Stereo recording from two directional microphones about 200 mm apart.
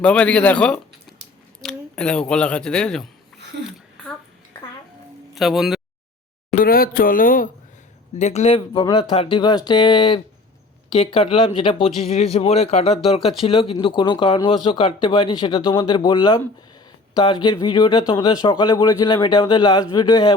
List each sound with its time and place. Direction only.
0.0 s speech: 5° left (ahead or behind)
5.3 s speech: centre (ahead or behind)
6.5 s speech: 45° left (ahead or behind); by 20.3 s 20° left (ahead or behind)